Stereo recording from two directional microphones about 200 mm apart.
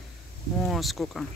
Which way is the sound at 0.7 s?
Centre (ahead or behind).